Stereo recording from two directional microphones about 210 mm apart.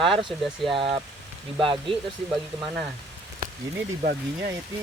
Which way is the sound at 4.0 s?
45° right (ahead or behind).